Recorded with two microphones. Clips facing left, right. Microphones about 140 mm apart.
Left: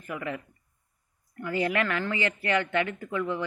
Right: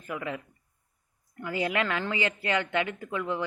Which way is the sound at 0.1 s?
15° right (ahead or behind).